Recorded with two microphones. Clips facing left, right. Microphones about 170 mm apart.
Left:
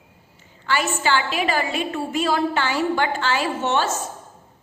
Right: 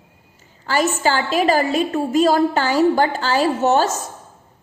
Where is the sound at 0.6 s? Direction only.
40° right (ahead or behind).